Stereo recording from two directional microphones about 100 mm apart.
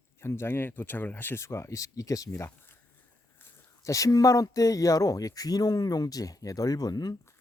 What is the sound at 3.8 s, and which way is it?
Speech, 30° left (ahead or behind).